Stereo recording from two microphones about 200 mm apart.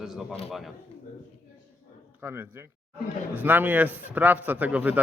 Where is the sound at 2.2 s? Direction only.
10° right (ahead or behind).